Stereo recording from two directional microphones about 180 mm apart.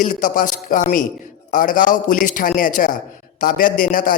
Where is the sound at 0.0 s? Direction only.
45° left (ahead or behind).